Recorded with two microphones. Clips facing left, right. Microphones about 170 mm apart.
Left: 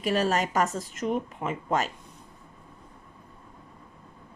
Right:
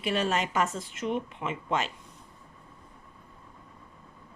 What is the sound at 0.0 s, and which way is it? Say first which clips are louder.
A woman's voice: left 3 dB; 40° left (ahead or behind).